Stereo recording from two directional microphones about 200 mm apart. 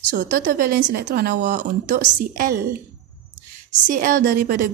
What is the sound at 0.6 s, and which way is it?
Speech, 45° right (ahead or behind).